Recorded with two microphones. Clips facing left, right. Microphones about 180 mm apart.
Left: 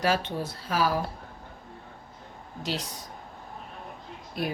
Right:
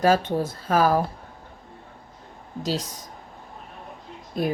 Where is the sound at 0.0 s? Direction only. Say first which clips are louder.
Right 7 dB; 45° right (ahead or behind).